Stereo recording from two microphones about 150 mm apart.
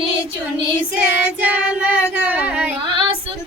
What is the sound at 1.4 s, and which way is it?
Child singing, 5° right (ahead or behind).